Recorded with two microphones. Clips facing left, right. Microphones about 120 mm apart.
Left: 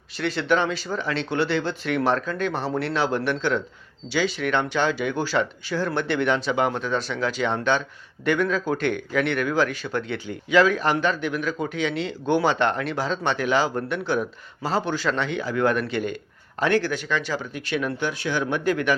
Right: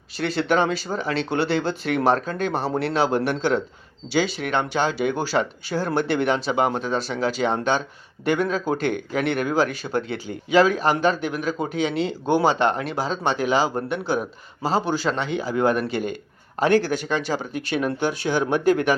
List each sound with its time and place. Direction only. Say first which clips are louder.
0.2 s speech: right 2 dB; 40° right (ahead or behind)
4.1 s speech: right 1 dB; 35° right (ahead or behind)